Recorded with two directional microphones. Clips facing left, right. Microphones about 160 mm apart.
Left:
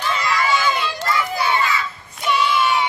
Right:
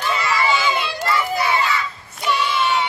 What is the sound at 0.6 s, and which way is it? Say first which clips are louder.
Crowd: even; 20° right (ahead or behind).